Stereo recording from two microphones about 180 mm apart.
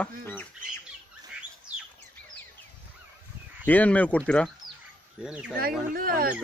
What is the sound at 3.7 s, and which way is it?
Speech, 10° left (ahead or behind).